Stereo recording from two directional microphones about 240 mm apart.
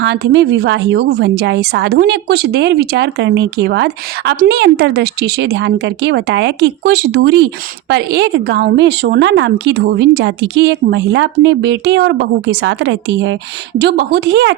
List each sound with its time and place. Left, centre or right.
0.0 s a woman's voice: right